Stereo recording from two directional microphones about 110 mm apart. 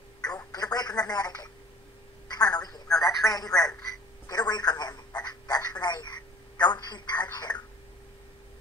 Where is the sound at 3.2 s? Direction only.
35° left (ahead or behind).